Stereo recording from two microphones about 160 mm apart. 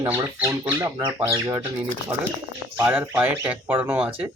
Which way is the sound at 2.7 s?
10° right (ahead or behind).